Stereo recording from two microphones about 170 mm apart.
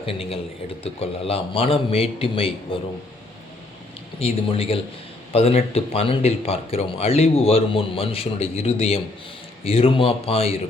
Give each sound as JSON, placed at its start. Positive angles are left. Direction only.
{"t": 0.0, "sound": "speech", "side_deg": 35}
{"t": 4.2, "sound": "speech", "side_deg": 35}